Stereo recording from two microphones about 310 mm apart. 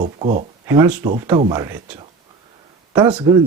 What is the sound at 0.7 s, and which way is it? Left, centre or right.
Speech, centre.